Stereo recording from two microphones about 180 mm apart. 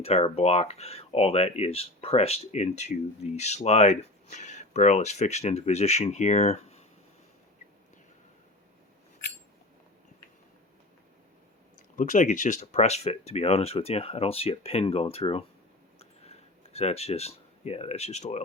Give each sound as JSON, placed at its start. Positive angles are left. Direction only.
{"t": 0.0, "sound": "speech", "side_deg": 35}
{"t": 11.9, "sound": "speech", "side_deg": 45}
{"t": 16.0, "sound": "a sound", "side_deg": 35}